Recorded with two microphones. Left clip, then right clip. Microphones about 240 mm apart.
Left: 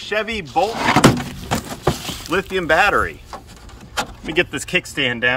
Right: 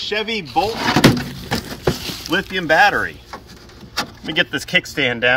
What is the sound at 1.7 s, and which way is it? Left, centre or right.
Vehicle, left.